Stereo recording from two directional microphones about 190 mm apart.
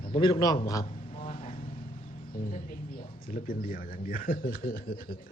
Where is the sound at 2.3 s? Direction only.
45° left (ahead or behind).